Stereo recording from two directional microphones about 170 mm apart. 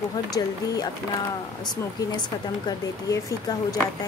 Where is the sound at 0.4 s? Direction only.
20° left (ahead or behind).